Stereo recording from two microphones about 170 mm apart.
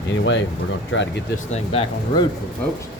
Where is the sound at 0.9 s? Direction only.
90° left.